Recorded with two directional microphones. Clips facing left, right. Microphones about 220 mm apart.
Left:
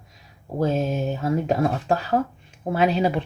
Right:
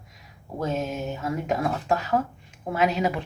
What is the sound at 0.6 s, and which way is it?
Speech, 30° left (ahead or behind).